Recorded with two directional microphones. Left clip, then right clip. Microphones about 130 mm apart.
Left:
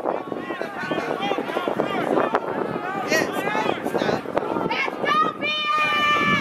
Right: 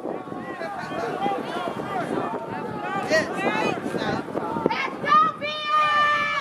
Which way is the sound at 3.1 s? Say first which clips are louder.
Even; 20° left (ahead or behind).